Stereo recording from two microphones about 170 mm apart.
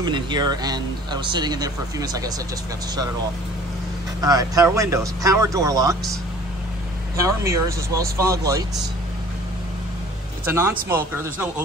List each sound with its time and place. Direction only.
0.0 s speech: 25° right (ahead or behind)
4.2 s speech: 20° right (ahead or behind)
7.2 s speech: 20° right (ahead or behind)
10.4 s speech: 10° right (ahead or behind)